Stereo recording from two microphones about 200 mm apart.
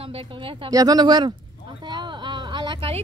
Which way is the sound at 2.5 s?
25° right (ahead or behind).